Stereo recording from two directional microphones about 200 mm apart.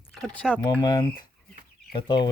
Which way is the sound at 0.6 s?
20° left (ahead or behind).